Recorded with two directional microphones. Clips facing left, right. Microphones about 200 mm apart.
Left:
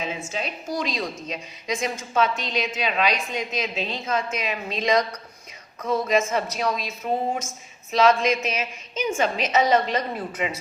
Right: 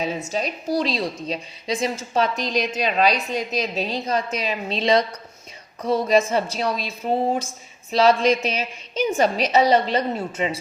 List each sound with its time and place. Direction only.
0.0 s a woman's voice: 40° right (ahead or behind)